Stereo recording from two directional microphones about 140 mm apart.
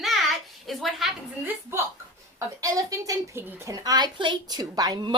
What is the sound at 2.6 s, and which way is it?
A woman's voice, 25° right (ahead or behind).